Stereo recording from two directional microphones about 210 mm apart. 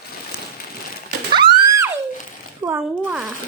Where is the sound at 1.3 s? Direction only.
20° right (ahead or behind).